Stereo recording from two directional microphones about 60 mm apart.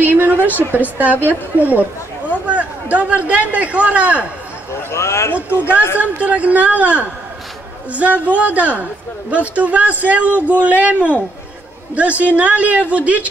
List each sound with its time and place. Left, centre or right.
0.0 s a sound: right
0.7 s a man's voice: right
2.4 s a sound: right
3.3 s a man's voice: right
4.9 s speech: left
5.9 s a man's voice: right